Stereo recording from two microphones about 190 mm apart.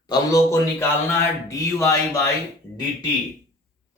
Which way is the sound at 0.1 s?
15° left (ahead or behind).